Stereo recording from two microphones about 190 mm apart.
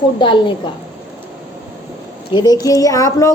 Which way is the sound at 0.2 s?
25° left (ahead or behind).